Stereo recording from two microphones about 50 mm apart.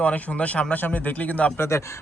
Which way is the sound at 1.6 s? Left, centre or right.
Left.